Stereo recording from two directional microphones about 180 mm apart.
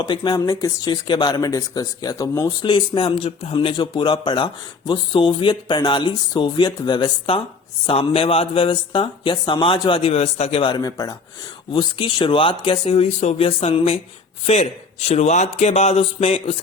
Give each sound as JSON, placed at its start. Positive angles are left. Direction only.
{"t": 0.0, "sound": "a man's voice", "side_deg": 25}